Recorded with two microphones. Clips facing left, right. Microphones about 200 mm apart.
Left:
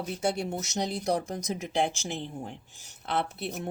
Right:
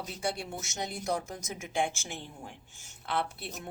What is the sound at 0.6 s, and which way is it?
Speech, 40° left (ahead or behind).